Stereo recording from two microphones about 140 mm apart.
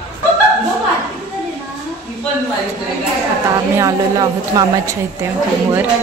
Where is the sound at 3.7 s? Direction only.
25° right (ahead or behind).